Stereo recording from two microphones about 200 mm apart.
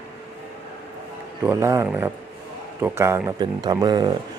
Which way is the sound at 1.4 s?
10° right (ahead or behind).